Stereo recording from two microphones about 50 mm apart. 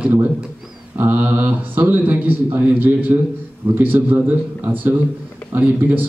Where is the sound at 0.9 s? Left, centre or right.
Right.